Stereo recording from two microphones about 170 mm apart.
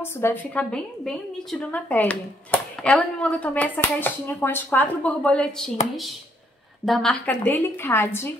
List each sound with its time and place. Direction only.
0.0 s a woman's voice: 15° left (ahead or behind)
6.9 s a woman's voice: 5° left (ahead or behind)